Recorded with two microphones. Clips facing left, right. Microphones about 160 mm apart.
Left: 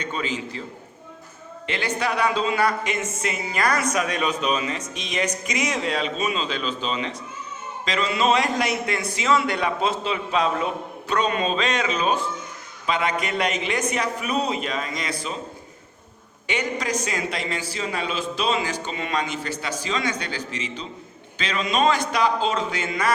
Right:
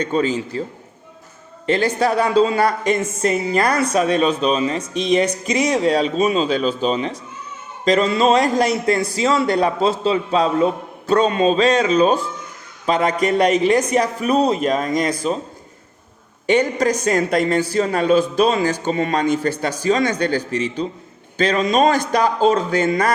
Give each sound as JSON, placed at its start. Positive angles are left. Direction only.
{"t": 0.0, "sound": "a woman's voice", "side_deg": -40}
{"t": 1.6, "sound": "a woman's voice", "side_deg": -40}
{"t": 16.5, "sound": "a man's voice", "side_deg": -45}